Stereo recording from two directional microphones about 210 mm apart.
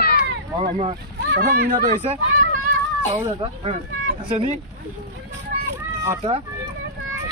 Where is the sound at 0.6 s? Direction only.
30° right (ahead or behind).